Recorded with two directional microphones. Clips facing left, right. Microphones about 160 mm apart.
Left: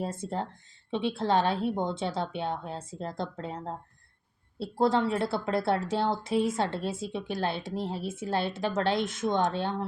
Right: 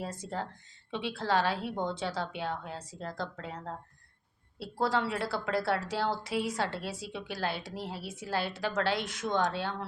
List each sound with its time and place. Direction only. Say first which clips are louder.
0.0 s a woman's voice: left 4 dB; 25° left (ahead or behind)